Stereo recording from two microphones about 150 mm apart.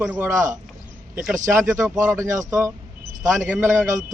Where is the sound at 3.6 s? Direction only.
15° right (ahead or behind).